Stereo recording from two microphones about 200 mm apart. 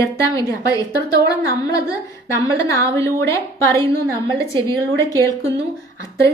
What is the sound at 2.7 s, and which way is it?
A woman's voice, 15° left (ahead or behind).